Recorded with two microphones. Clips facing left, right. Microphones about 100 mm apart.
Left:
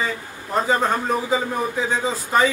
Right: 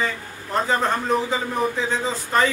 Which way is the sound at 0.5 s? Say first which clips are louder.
Left 1 dB; 5° left (ahead or behind).